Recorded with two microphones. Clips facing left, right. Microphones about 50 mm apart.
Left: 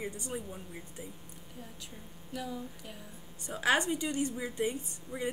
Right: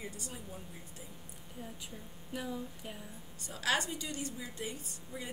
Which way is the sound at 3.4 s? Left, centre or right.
Left.